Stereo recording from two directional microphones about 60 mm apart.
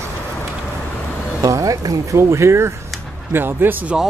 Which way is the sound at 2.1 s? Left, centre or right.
Right.